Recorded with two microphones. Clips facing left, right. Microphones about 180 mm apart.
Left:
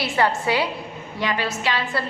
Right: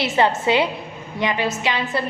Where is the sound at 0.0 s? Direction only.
20° right (ahead or behind).